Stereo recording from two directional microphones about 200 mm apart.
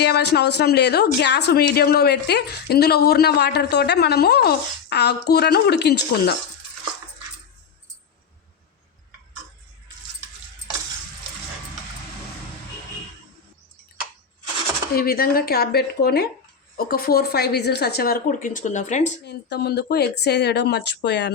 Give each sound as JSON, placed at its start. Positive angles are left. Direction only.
{"t": 0.0, "sound": "speech", "side_deg": 55}
{"t": 14.9, "sound": "speech", "side_deg": 50}
{"t": 19.2, "sound": "speech", "side_deg": 55}